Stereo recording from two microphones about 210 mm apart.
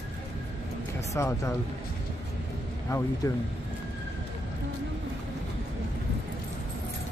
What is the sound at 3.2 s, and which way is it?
Speech, 15° left (ahead or behind).